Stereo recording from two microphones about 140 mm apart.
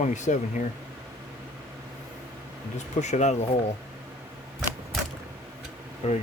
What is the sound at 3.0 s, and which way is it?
Speech, 55° left (ahead or behind).